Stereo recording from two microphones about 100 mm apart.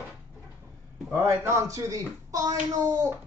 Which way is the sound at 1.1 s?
25° right (ahead or behind).